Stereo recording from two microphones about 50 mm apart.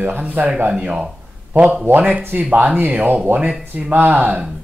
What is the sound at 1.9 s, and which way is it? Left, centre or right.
Speech, right.